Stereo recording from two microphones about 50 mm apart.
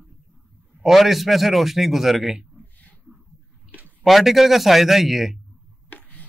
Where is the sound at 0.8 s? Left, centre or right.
Centre.